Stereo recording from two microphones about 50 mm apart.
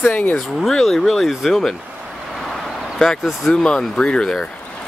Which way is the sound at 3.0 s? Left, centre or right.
Centre.